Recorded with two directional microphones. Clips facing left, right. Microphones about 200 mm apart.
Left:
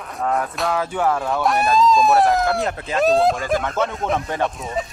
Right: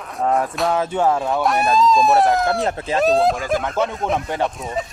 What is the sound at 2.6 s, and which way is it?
Speech, 30° right (ahead or behind).